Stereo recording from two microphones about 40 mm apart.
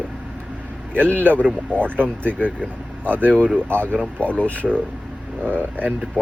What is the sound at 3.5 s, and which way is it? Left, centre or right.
Speech, left.